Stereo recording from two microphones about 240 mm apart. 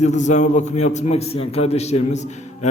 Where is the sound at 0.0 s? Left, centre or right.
Left.